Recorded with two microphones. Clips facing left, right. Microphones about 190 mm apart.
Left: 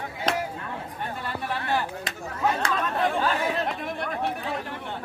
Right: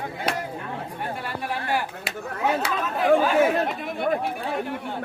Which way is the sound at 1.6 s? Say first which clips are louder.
Left 1 dB; 10° right (ahead or behind).